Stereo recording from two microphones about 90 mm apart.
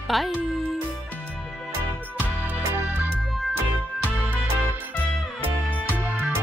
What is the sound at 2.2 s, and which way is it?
Music, 20° right (ahead or behind).